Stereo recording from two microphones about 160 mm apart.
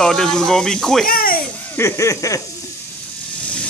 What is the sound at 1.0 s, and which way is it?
Music, 65° left (ahead or behind).